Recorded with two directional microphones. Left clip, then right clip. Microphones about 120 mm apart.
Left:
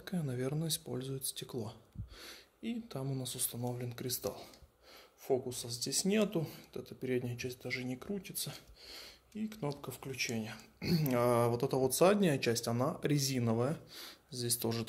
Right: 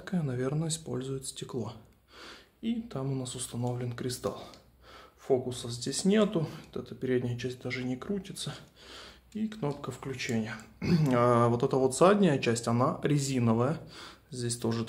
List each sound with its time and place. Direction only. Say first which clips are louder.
0.0 s speech: right 5 dB; 40° left (ahead or behind)